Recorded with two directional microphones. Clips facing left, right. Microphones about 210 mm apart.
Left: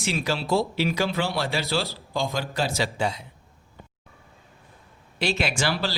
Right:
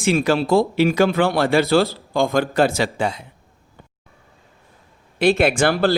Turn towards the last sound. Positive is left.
turn(degrees=-55)  # may be behind; listen again after turning